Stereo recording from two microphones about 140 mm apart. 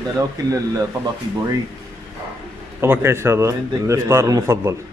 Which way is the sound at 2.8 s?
15° right (ahead or behind).